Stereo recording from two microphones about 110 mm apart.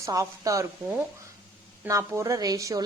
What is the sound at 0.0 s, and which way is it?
A woman's voice, 30° right (ahead or behind).